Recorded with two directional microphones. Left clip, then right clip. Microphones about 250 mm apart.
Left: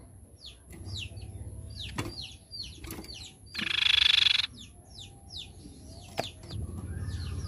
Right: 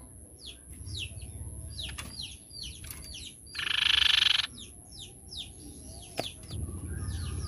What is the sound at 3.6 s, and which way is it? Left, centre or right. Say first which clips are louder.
Frog: left 1 dB; centre.